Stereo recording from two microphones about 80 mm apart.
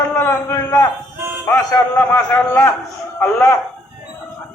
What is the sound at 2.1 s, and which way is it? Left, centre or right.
Speech, left.